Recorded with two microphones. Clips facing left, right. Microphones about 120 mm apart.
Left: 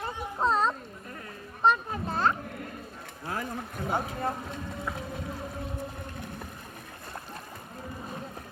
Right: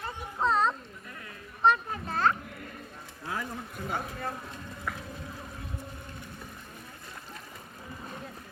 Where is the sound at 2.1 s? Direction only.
10° left (ahead or behind).